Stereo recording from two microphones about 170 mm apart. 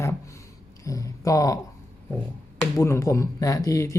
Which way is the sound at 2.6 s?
15° left (ahead or behind).